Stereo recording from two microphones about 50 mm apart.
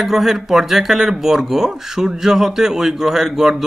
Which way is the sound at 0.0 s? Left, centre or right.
Centre.